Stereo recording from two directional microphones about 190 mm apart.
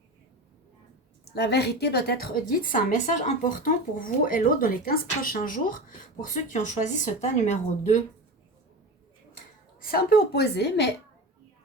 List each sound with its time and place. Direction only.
1.2 s a woman's voice: 60° left (ahead or behind); by 8.0 s 40° left (ahead or behind)
9.8 s a woman's voice: 50° left (ahead or behind)